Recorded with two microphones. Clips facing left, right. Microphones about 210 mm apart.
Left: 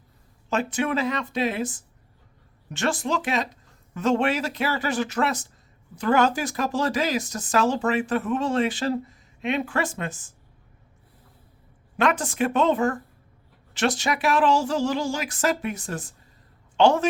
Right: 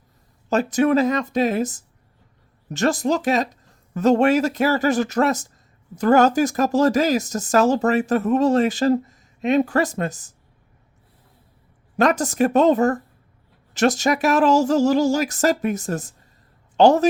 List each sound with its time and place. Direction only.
0.5 s speech: 40° right (ahead or behind)
11.9 s speech: 40° right (ahead or behind)